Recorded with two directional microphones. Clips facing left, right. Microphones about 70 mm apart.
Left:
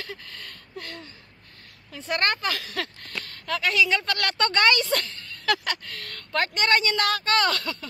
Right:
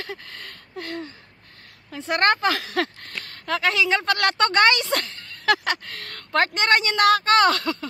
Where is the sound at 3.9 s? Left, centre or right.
Right.